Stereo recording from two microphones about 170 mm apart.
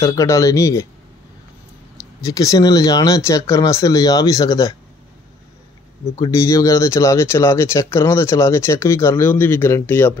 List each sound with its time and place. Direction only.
0.0 s speech: 20° left (ahead or behind)
2.2 s speech: 20° left (ahead or behind)
6.1 s speech: 20° left (ahead or behind)